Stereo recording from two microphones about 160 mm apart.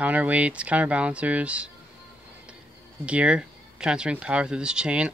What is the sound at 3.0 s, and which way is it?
Speech, 5° right (ahead or behind).